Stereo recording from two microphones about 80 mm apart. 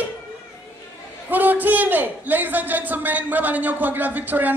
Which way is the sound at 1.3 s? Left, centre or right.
Right.